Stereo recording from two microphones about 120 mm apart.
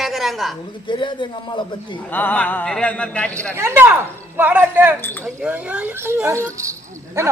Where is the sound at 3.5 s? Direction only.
20° right (ahead or behind).